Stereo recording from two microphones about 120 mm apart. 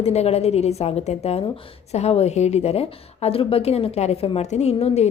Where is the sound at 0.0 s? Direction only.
60° left (ahead or behind).